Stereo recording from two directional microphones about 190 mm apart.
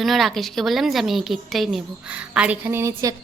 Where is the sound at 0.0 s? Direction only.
Centre (ahead or behind).